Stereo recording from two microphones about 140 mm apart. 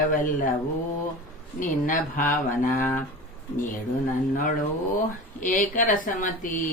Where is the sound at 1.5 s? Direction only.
70° left (ahead or behind).